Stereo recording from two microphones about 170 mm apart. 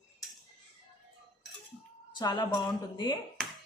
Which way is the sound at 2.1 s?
25° left (ahead or behind).